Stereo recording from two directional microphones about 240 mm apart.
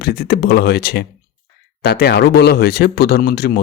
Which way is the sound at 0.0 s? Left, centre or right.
Left.